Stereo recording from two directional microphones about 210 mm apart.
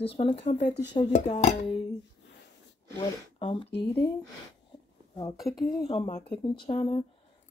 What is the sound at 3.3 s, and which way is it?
Speech, 25° left (ahead or behind).